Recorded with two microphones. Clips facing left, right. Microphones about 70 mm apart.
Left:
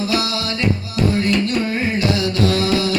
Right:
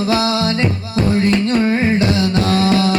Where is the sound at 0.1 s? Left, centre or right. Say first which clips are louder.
Right 5 dB; right.